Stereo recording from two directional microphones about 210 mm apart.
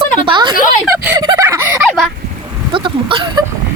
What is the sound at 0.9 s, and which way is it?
Turkey, 15° right (ahead or behind).